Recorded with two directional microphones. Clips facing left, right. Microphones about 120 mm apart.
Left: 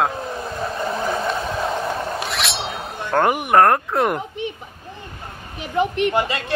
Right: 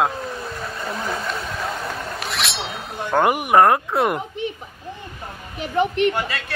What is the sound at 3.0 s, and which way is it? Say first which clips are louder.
Speech: even; 10° right (ahead or behind).